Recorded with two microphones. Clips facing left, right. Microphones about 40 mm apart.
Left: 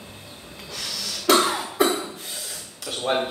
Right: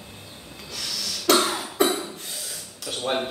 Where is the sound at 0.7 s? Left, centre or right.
Centre.